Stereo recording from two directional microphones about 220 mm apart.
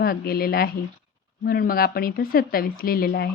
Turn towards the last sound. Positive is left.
turn(degrees=45)  # may be behind; listen again after turning